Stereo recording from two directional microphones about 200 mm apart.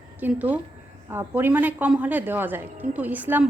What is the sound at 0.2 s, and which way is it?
A woman's voice, 10° right (ahead or behind).